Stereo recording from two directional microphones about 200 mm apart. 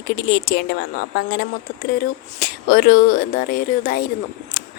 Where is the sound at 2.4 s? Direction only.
50° left (ahead or behind).